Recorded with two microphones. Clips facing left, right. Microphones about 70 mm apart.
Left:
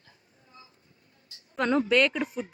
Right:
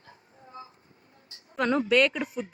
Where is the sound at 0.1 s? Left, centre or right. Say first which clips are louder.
Right 10 dB; right.